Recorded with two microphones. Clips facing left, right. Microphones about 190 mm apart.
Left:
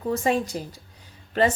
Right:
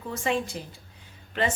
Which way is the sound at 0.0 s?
40° left (ahead or behind).